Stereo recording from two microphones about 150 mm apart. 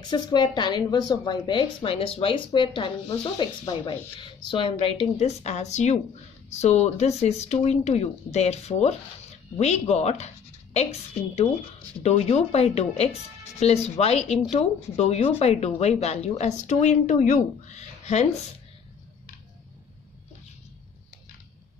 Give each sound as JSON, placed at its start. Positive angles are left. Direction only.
{"t": 0.1, "sound": "a woman's voice", "side_deg": 30}